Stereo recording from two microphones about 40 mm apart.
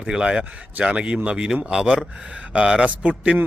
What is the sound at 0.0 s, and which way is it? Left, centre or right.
Speech, right.